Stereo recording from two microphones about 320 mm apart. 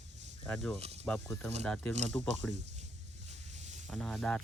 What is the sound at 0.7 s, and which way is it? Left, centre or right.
Speech, centre.